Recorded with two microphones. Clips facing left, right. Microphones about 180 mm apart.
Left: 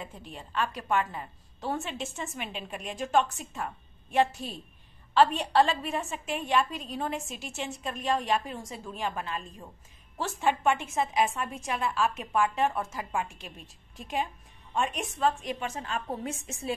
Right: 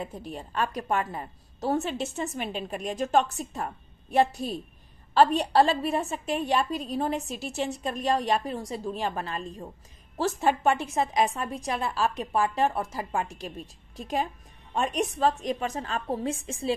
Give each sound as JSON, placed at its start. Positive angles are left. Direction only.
{"t": 0.0, "sound": "a woman's voice", "side_deg": -40}